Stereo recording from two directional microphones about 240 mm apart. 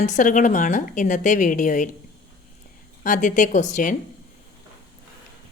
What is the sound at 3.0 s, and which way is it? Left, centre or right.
Speech, left.